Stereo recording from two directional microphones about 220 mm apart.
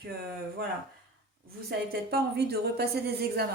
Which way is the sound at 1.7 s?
45° right (ahead or behind).